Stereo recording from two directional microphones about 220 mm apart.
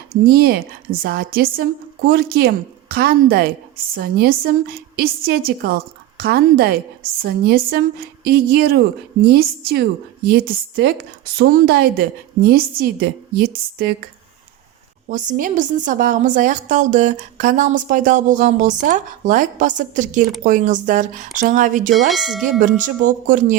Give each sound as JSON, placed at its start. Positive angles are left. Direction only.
{"t": 0.1, "sound": "a woman's voice", "side_deg": -45}
{"t": 15.1, "sound": "a woman's voice", "side_deg": -35}
{"t": 22.1, "sound": "speech", "side_deg": 0}
{"t": 23.0, "sound": "a woman's voice", "side_deg": -35}